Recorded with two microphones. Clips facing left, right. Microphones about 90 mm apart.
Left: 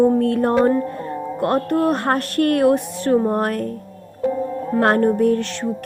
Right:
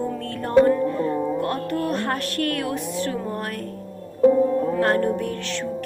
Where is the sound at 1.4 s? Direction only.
55° left (ahead or behind).